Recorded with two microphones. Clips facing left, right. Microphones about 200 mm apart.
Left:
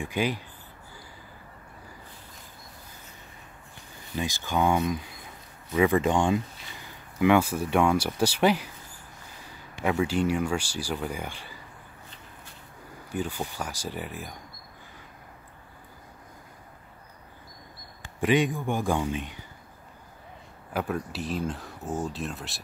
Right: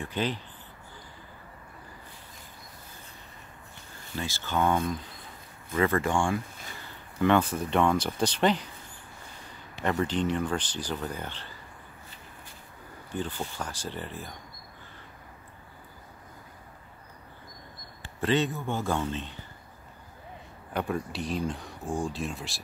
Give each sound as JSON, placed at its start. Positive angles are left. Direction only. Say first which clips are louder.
{"t": 0.0, "sound": "speech", "louder": "left 2 dB", "side_deg": 10}
{"t": 4.1, "sound": "speech", "louder": "left 3 dB", "side_deg": 15}
{"t": 7.2, "sound": "speech", "louder": "left 2 dB", "side_deg": 10}
{"t": 9.8, "sound": "speech", "louder": "left 2 dB", "side_deg": 0}
{"t": 13.1, "sound": "speech", "louder": "left 2 dB", "side_deg": 10}
{"t": 18.0, "sound": "speech", "louder": "left 3 dB", "side_deg": 15}
{"t": 20.7, "sound": "speech", "louder": "left 1 dB", "side_deg": 5}